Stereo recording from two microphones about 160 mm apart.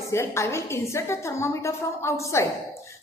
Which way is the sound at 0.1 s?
15° left (ahead or behind).